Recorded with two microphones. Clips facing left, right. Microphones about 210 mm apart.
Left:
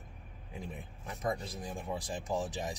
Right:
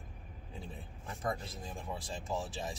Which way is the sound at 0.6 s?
15° left (ahead or behind).